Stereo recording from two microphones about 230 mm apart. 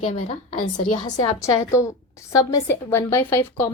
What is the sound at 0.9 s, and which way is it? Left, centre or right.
Speech, left.